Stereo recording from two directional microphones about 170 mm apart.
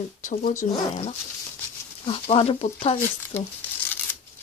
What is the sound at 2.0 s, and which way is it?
Speech, 30° left (ahead or behind).